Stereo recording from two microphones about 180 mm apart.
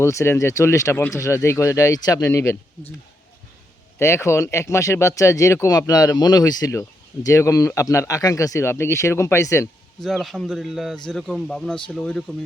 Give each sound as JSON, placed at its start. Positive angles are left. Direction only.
{"t": 0.0, "sound": "speech", "side_deg": 15}
{"t": 3.9, "sound": "speech", "side_deg": 15}
{"t": 10.0, "sound": "speech", "side_deg": 0}